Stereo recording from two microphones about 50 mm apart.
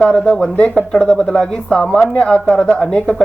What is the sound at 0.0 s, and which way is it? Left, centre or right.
Speech, centre.